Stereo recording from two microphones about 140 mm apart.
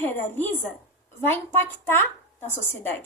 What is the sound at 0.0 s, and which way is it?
A woman's voice, 15° left (ahead or behind).